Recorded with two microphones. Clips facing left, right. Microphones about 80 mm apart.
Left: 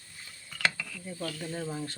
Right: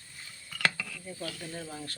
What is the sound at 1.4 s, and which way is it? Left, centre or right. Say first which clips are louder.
Speech: left 5 dB; centre.